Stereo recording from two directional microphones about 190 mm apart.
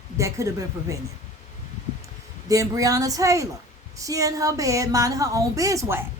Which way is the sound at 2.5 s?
15° right (ahead or behind).